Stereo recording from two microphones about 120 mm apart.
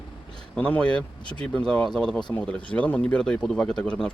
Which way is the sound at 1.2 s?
40° left (ahead or behind).